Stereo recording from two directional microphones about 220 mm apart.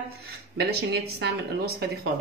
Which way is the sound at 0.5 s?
50° right (ahead or behind).